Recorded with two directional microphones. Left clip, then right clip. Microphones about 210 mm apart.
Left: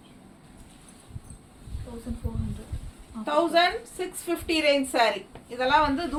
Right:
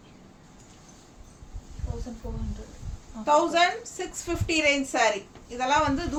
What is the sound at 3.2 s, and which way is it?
A woman's voice, 15° right (ahead or behind).